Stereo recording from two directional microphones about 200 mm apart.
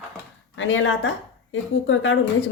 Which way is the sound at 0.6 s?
75° left (ahead or behind).